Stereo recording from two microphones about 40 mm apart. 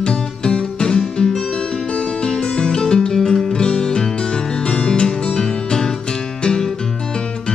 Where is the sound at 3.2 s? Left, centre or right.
Centre.